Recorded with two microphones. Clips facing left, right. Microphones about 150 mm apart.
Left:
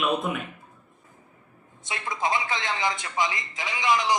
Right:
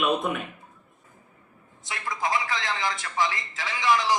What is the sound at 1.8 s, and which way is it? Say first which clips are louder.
Speech: left 1 dB; 20° left (ahead or behind).